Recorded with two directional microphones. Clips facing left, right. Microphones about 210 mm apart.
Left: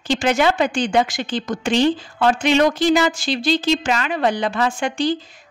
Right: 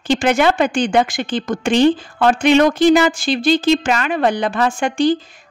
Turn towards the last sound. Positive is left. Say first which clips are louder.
# right 4 dB
turn(degrees=-50)  # may be behind; listen again after turning